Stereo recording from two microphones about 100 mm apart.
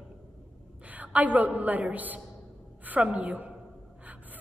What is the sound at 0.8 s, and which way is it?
A woman's voice, 15° right (ahead or behind).